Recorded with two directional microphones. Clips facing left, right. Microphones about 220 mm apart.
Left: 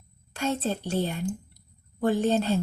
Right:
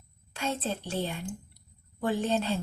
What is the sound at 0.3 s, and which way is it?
A woman's voice, 40° left (ahead or behind).